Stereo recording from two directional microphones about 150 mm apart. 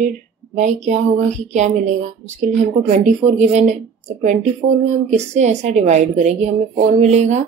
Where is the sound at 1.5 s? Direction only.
55° right (ahead or behind).